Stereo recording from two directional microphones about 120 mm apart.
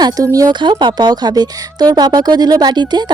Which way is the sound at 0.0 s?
30° right (ahead or behind).